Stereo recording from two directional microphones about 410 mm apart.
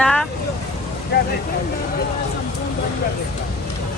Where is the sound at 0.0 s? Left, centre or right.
Centre.